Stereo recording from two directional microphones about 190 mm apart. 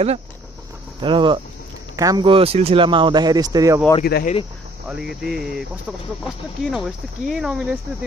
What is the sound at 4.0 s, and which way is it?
Speech, 50° left (ahead or behind).